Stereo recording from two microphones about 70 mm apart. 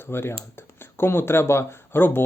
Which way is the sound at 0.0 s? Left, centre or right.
Left.